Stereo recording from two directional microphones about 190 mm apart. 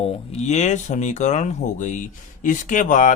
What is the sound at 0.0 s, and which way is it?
Speech, 35° left (ahead or behind).